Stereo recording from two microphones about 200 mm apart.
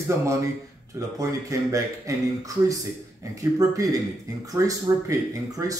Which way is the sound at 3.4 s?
15° right (ahead or behind).